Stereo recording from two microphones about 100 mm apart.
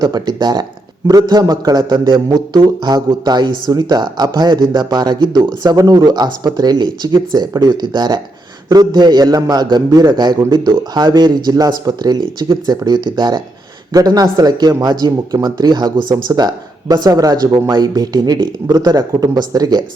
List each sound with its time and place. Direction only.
0.0 s a man's voice: 45° right (ahead or behind)